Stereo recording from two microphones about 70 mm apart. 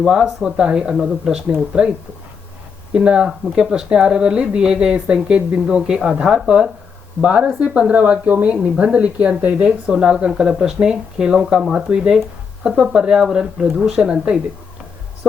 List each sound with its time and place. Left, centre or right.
0.0 s speech: centre
2.9 s speech: centre
9.6 s speech: centre